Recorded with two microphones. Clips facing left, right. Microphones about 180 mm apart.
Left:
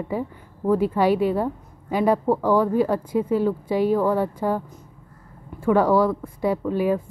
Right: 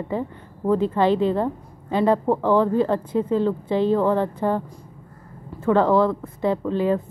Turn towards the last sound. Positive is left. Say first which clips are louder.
# even
turn(degrees=10)  # may be behind; listen again after turning